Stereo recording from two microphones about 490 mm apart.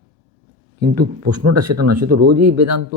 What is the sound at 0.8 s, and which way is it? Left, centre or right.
Speech, centre.